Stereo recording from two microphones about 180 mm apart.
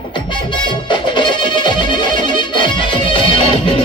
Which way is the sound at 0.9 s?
25° left (ahead or behind).